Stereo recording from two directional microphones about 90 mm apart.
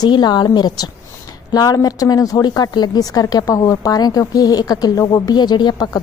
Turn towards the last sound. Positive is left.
turn(degrees=50)  # may be behind; listen again after turning